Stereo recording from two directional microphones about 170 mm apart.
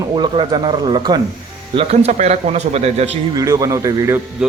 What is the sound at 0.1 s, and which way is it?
A man's voice, 25° right (ahead or behind).